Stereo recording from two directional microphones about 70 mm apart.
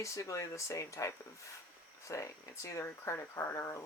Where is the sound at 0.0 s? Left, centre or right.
Left.